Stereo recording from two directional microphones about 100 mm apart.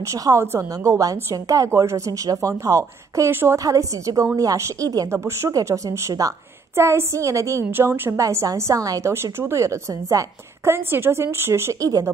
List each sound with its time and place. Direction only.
0.0 s a woman's voice: 30° right (ahead or behind)
5.1 s a woman's voice: 25° right (ahead or behind)
7.7 s a woman's voice: 20° right (ahead or behind)